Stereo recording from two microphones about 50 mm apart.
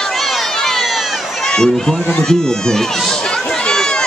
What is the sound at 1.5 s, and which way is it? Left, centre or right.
Speech, centre.